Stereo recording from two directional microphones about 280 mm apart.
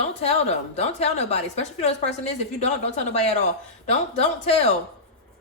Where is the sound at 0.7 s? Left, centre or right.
Left.